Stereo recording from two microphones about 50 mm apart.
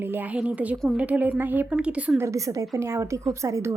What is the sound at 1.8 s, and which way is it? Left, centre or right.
Speech, right.